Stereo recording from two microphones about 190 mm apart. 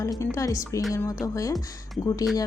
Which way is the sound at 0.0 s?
15° left (ahead or behind).